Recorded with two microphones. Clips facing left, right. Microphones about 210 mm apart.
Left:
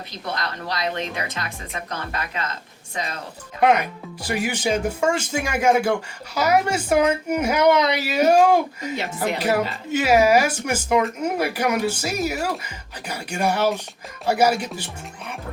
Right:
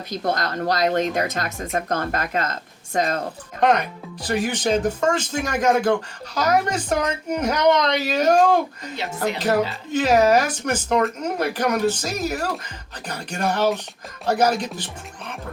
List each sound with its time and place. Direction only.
0.1 s speech: 45° right (ahead or behind)
3.6 s speech: 10° left (ahead or behind)